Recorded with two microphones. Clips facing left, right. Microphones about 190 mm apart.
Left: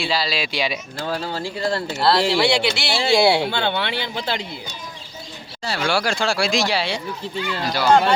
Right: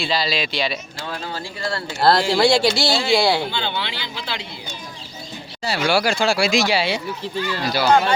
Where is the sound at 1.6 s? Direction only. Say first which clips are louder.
Left 4 dB; 20° left (ahead or behind).